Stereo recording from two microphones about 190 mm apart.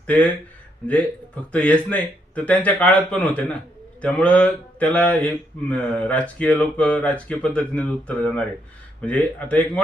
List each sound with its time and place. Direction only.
0.1 s speech: 10° left (ahead or behind)
1.5 s speech: 5° left (ahead or behind)